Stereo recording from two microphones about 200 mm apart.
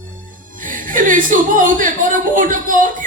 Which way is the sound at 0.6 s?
40° right (ahead or behind).